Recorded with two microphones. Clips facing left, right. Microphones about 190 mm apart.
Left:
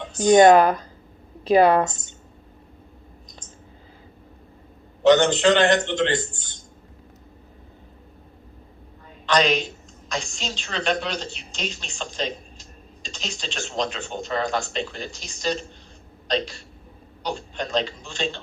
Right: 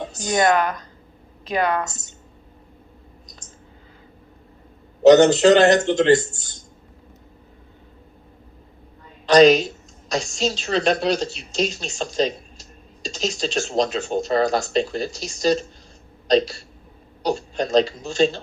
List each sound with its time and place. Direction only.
0.3 s speech: 30° left (ahead or behind)
5.0 s a woman's voice: 40° right (ahead or behind)
9.2 s a woman's voice: 40° right (ahead or behind)
17.2 s a woman's voice: 40° right (ahead or behind)